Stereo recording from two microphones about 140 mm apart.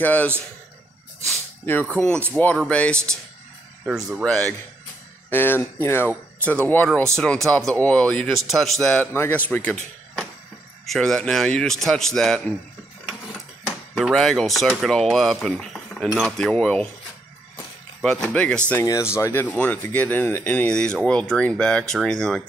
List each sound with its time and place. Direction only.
0.0 s speech: 10° left (ahead or behind)
2.3 s speech: 10° left (ahead or behind)
3.8 s speech: 5° right (ahead or behind)
4.2 s speech: 5° left (ahead or behind)
10.9 s speech: 5° left (ahead or behind)
13.9 s speech: 5° left (ahead or behind)
18.0 s speech: 5° left (ahead or behind)
18.8 s speech: 20° left (ahead or behind); by 22.4 s 5° left (ahead or behind)